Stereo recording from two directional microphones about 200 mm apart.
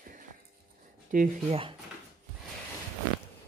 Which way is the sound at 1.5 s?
25° right (ahead or behind).